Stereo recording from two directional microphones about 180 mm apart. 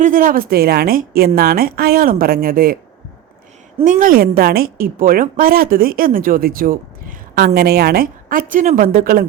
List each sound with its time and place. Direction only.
0.0 s speech: 50° right (ahead or behind)
3.8 s a woman's voice: 50° right (ahead or behind)